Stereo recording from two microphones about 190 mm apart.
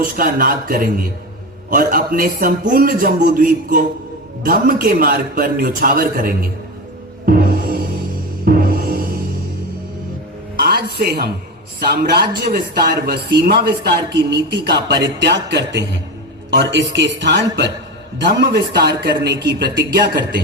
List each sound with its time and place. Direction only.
0.0 s a man's voice: 45° right (ahead or behind)
7.3 s music: 50° right (ahead or behind)
10.6 s music: 55° right (ahead or behind)
11.8 s a man's voice: 50° right (ahead or behind); by 17.7 s 70° right (ahead or behind)
18.3 s speech: 60° right (ahead or behind)